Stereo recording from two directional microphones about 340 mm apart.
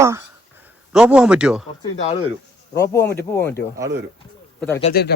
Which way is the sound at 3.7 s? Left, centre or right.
Centre.